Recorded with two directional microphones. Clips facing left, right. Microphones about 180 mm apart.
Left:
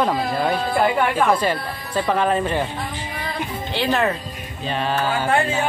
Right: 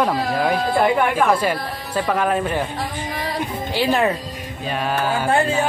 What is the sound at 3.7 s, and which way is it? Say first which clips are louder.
Speech: right 2 dB; 10° right (ahead or behind).